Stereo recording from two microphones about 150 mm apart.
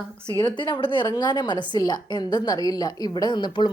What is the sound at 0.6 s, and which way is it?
A woman's voice, 35° left (ahead or behind).